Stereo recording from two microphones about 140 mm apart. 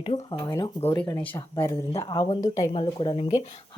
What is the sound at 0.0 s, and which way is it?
Speech, 40° left (ahead or behind).